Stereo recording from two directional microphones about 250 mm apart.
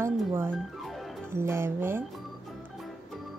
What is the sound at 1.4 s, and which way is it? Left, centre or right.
Speech, centre.